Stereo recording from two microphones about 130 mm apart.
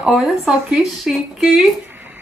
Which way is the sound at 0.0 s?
5° right (ahead or behind).